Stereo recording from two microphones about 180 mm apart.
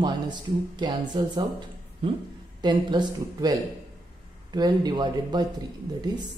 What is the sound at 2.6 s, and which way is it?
Speech, 25° right (ahead or behind).